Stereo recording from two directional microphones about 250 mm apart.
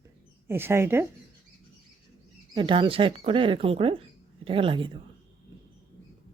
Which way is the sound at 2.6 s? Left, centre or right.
Centre.